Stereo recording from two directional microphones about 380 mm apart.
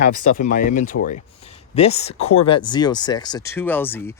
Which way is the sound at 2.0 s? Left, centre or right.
Centre.